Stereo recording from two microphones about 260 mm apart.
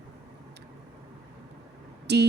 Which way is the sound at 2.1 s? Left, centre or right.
Right.